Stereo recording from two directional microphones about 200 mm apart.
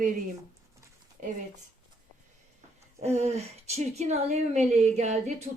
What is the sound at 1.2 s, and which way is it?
Speech, 40° right (ahead or behind).